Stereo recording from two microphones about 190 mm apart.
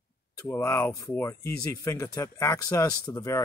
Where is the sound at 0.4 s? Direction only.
10° left (ahead or behind).